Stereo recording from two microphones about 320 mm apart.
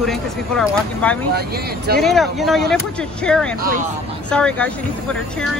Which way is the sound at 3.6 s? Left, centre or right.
Right.